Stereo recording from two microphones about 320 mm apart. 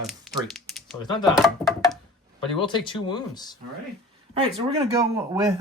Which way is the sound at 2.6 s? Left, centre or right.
Centre.